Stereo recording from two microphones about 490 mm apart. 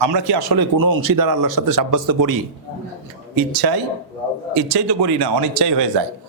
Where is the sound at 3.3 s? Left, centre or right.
Right.